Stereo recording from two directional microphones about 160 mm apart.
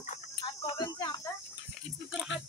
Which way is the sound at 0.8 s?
25° left (ahead or behind).